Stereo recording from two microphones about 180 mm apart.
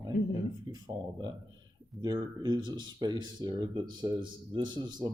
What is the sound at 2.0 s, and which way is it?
Speech, 25° right (ahead or behind).